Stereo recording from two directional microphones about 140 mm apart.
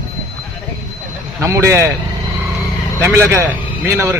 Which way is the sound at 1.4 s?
20° right (ahead or behind).